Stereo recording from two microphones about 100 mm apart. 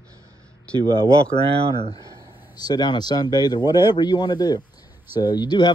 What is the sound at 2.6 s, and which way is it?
Speech, 45° left (ahead or behind).